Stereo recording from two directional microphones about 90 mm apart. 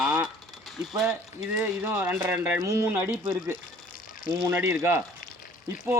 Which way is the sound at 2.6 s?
35° right (ahead or behind).